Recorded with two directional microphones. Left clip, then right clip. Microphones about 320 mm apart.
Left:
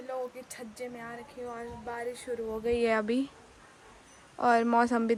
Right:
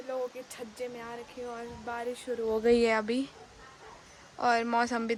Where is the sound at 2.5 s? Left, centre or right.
Right.